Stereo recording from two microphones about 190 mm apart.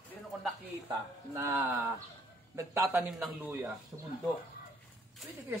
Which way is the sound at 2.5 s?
15° right (ahead or behind).